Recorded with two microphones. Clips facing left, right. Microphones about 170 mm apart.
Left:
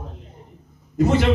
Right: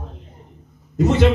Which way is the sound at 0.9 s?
25° right (ahead or behind).